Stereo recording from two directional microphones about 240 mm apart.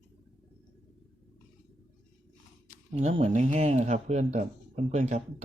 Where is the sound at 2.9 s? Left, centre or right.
Right.